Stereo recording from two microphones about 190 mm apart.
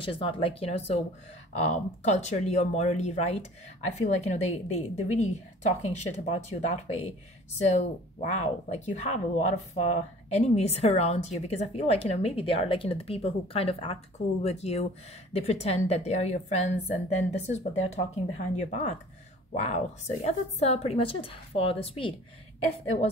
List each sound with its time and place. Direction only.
0.0 s speech: 25° left (ahead or behind)